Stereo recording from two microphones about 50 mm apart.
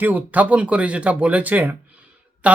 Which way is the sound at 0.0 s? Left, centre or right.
Right.